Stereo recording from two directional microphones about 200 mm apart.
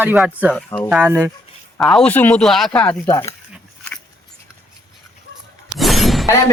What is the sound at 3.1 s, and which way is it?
Speech, 25° left (ahead or behind).